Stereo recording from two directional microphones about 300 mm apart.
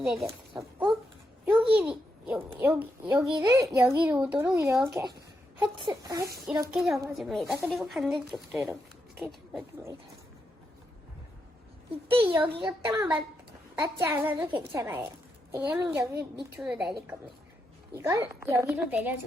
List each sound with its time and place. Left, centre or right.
0.0 s a child's voice: centre
1.6 s a child's voice: centre
9.1 s pig: centre
12.1 s a child's voice: centre
17.9 s a child's voice: centre